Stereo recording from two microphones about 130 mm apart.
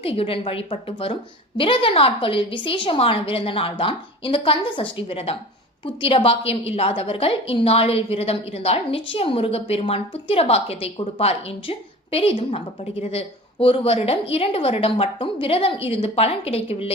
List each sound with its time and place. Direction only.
0.0 s a woman's voice: 45° left (ahead or behind)